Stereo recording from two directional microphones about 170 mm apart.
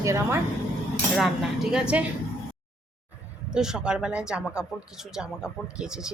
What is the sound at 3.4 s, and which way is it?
Speech, 5° right (ahead or behind).